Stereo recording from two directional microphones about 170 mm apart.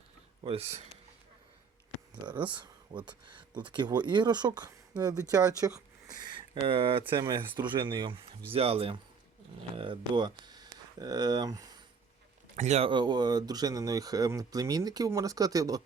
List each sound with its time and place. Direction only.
0.4 s speech: 35° right (ahead or behind)
2.2 s speech: 25° right (ahead or behind)
12.5 s speech: 40° right (ahead or behind)
12.9 s speech: 25° right (ahead or behind)